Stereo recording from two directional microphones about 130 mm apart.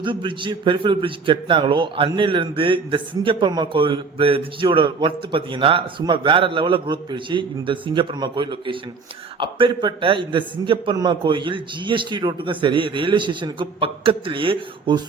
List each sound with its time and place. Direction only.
0.0 s a man's voice: 40° right (ahead or behind)